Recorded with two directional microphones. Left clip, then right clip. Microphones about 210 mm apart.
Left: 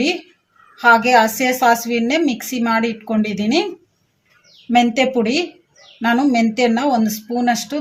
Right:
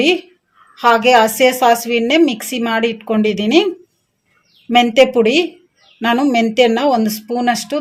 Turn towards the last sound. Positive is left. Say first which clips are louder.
# right 2 dB
turn(degrees=-35)  # may be behind; listen again after turning